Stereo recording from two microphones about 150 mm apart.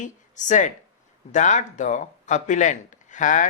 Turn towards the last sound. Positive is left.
turn(degrees=60)  # may be behind; listen again after turning